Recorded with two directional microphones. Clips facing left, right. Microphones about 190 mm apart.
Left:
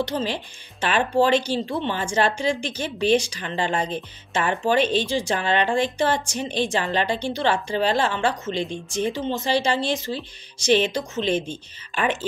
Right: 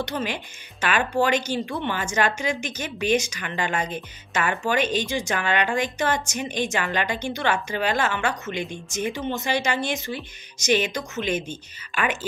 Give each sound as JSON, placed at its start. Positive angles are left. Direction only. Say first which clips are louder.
{"t": 0.0, "sound": "a woman's voice", "louder": "left 3 dB", "side_deg": 30}
{"t": 4.7, "sound": "speech", "louder": "left 3 dB", "side_deg": -15}
{"t": 5.0, "sound": "a woman's voice", "louder": "left 2 dB", "side_deg": 30}